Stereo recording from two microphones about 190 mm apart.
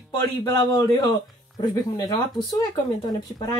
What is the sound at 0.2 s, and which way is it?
Speech, 20° left (ahead or behind).